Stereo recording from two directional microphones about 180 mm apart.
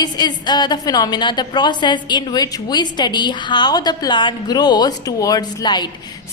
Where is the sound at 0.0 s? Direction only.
25° left (ahead or behind).